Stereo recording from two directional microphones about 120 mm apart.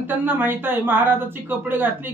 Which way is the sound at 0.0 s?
15° right (ahead or behind).